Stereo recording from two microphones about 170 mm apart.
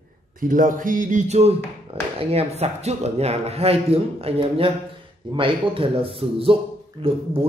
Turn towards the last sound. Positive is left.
turn(degrees=-35)  # may be behind; listen again after turning